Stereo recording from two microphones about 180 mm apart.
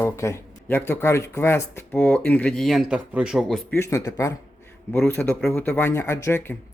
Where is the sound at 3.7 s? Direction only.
15° left (ahead or behind).